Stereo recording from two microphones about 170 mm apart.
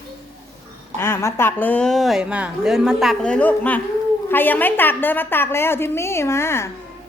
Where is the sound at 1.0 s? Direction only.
15° left (ahead or behind).